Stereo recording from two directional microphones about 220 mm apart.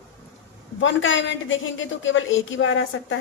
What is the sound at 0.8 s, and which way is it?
A woman's voice, 60° left (ahead or behind).